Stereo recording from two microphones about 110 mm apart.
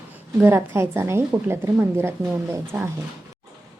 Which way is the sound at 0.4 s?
20° right (ahead or behind).